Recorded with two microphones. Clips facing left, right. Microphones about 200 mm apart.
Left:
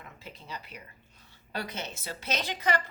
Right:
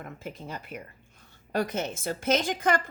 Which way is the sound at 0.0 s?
50° right (ahead or behind).